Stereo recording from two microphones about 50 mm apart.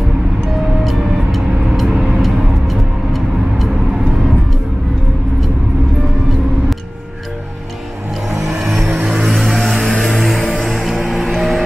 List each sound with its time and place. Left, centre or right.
0.8 s vehicle: centre
8.5 s vehicle: centre
9.0 s vehicle: right
9.6 s vehicle: centre
10.0 s music: centre